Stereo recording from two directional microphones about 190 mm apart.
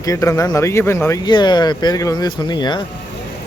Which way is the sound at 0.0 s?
15° left (ahead or behind).